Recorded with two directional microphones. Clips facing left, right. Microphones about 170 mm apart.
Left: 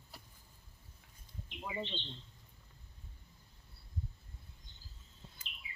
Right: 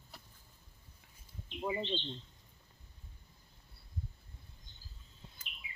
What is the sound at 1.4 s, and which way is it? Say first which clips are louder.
Bird: right 5 dB; 30° right (ahead or behind).